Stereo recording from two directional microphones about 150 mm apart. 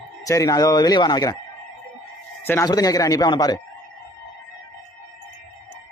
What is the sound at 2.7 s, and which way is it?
Speech, 25° left (ahead or behind).